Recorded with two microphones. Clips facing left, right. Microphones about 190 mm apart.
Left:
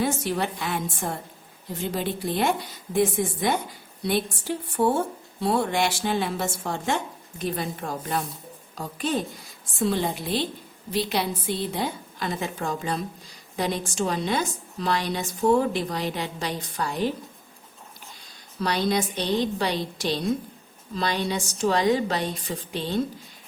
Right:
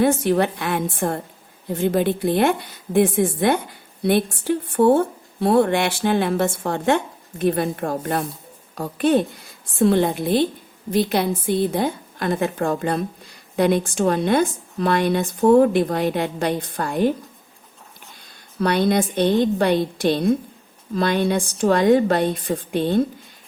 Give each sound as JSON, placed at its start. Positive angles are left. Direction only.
{"t": 0.0, "sound": "a woman's voice", "side_deg": -55}
{"t": 18.6, "sound": "a woman's voice", "side_deg": -55}